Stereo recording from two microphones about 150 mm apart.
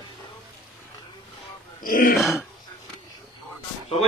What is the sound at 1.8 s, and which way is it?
Speech, 70° left (ahead or behind).